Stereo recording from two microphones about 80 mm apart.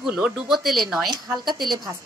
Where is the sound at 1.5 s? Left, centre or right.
Right.